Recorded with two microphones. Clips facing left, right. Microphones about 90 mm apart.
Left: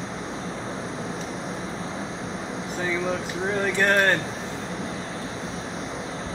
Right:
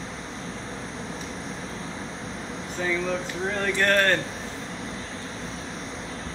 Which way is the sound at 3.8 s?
15° left (ahead or behind).